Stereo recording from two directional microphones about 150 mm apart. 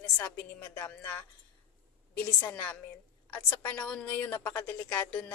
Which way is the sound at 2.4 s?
10° left (ahead or behind).